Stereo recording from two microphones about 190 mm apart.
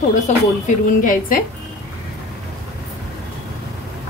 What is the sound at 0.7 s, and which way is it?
Speech, 45° left (ahead or behind).